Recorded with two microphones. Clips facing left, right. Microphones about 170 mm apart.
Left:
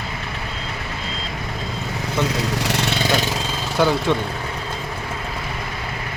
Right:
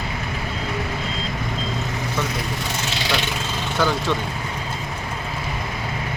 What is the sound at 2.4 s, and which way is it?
Speech, 80° left.